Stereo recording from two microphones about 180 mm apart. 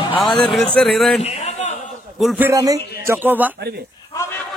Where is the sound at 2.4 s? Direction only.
20° right (ahead or behind).